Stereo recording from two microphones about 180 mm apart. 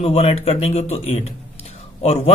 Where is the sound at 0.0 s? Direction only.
35° left (ahead or behind).